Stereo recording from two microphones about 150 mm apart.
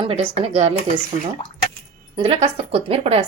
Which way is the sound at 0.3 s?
45° right (ahead or behind).